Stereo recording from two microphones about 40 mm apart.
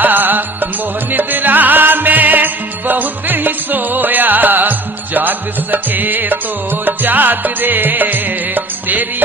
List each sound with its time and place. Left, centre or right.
0.0 s music: right